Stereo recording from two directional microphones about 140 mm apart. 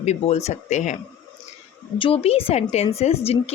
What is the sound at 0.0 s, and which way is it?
Speech, 50° left (ahead or behind).